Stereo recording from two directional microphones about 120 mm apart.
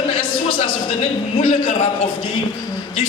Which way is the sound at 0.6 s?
60° left (ahead or behind).